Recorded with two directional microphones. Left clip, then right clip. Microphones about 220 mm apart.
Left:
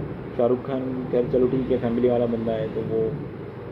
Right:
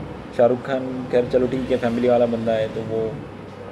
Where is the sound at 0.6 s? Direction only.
20° right (ahead or behind).